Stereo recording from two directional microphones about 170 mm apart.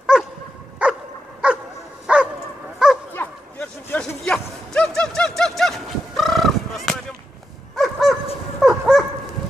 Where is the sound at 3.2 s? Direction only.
10° left (ahead or behind).